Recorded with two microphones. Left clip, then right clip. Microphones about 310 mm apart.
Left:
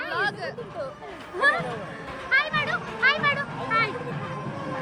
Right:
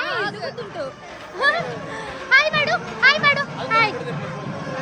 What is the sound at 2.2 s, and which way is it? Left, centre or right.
Music, centre.